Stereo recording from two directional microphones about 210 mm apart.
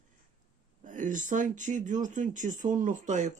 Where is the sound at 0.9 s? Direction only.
40° right (ahead or behind).